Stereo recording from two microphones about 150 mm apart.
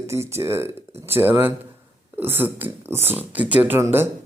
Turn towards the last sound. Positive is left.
turn(degrees=-15)  # may be behind; listen again after turning